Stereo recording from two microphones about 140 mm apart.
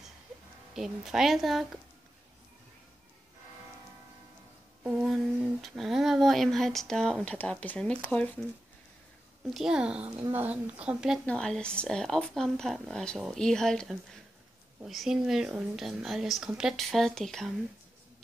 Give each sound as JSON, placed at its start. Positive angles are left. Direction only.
{"t": 0.7, "sound": "speech", "side_deg": -5}
{"t": 4.8, "sound": "speech", "side_deg": -5}
{"t": 9.5, "sound": "a woman's voice", "side_deg": -5}
{"t": 11.2, "sound": "speech", "side_deg": 5}